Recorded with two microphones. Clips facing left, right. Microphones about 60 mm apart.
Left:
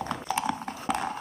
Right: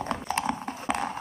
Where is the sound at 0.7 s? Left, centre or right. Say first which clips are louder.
Right 1 dB; centre.